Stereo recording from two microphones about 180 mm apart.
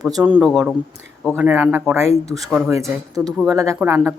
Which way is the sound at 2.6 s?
15° right (ahead or behind).